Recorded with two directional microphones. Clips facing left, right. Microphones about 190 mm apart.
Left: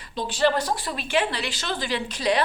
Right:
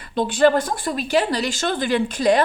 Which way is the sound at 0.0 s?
55° right (ahead or behind).